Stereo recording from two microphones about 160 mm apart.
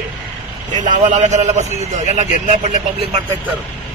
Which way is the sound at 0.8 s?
50° right (ahead or behind).